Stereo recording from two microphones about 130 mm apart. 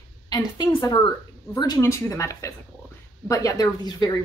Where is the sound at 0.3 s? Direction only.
30° left (ahead or behind).